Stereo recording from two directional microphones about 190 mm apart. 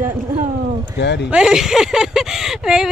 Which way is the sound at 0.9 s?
65° left (ahead or behind).